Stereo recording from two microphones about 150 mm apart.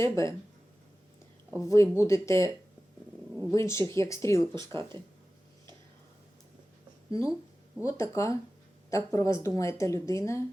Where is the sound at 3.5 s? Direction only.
20° left (ahead or behind).